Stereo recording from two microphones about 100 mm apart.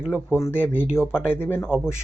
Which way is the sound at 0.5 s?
20° left (ahead or behind).